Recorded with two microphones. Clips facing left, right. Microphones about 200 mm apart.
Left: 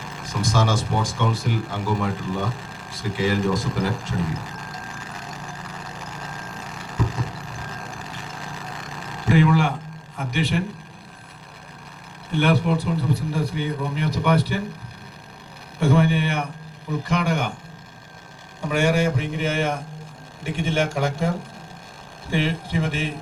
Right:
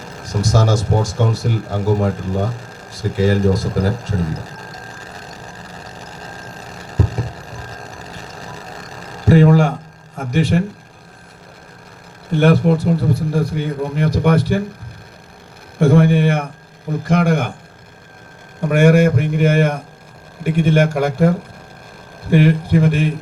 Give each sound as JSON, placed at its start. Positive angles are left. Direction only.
{"t": 0.0, "sound": "a sound", "side_deg": -40}
{"t": 10.2, "sound": "a man's voice", "side_deg": -45}
{"t": 12.3, "sound": "a man's voice", "side_deg": -45}
{"t": 15.8, "sound": "a man's voice", "side_deg": -50}
{"t": 18.6, "sound": "a man's voice", "side_deg": -60}